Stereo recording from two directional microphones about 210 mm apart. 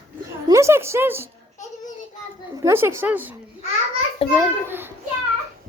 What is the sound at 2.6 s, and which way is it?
Speech, 15° right (ahead or behind).